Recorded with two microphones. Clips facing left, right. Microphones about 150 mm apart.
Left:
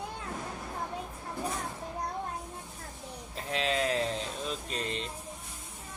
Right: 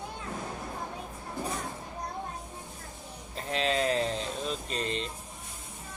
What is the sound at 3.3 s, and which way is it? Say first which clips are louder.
Speech: right 2 dB; 5° left (ahead or behind).